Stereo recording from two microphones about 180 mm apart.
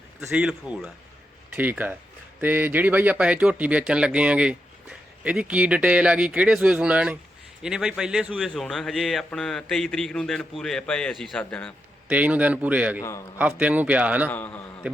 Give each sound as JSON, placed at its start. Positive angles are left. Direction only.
{"t": 0.2, "sound": "a man's voice", "side_deg": -5}
{"t": 12.0, "sound": "speech", "side_deg": -10}
{"t": 13.0, "sound": "a man's voice", "side_deg": 15}
{"t": 13.4, "sound": "speech", "side_deg": -5}
{"t": 14.3, "sound": "a man's voice", "side_deg": 10}